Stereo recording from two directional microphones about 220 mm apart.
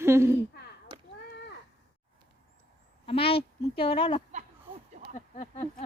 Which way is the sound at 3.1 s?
25° left (ahead or behind).